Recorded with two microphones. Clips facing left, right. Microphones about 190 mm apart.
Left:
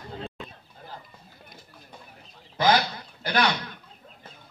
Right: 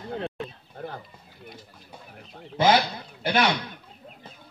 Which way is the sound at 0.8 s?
60° right (ahead or behind).